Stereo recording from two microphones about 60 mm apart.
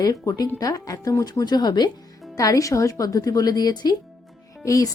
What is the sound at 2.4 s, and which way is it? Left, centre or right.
Speech, left.